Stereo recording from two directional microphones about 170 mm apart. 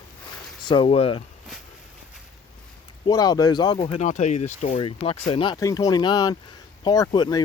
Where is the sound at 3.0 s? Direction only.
25° left (ahead or behind).